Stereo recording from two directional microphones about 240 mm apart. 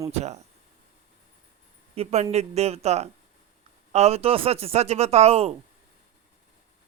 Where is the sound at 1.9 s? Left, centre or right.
Right.